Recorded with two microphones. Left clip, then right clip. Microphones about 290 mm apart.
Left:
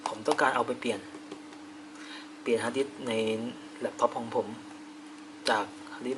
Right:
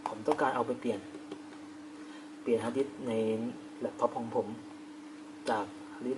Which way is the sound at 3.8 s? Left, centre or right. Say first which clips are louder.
Left 4 dB; centre.